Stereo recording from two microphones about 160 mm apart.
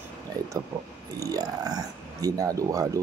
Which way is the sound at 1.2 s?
25° right (ahead or behind).